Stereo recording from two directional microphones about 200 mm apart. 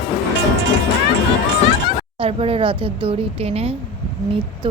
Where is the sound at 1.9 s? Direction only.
30° right (ahead or behind).